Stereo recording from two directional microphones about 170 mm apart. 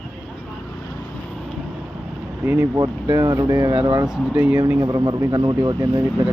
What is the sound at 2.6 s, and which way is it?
Speech, 25° right (ahead or behind).